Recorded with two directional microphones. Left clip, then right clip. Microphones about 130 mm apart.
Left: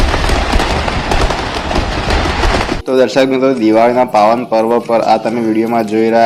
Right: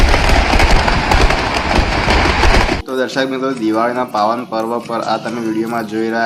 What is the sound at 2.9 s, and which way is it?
Speech, 45° left (ahead or behind).